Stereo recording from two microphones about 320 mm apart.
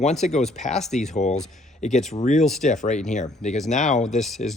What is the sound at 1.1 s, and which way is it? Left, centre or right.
Speech, left.